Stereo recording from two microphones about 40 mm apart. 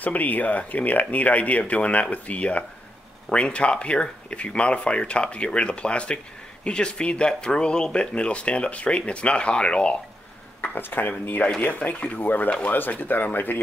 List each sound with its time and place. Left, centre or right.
0.0 s speech: left
10.6 s speech: left